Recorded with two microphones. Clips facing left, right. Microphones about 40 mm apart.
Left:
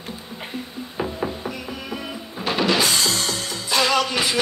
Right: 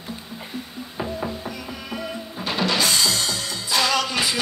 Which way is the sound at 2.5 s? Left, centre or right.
Centre.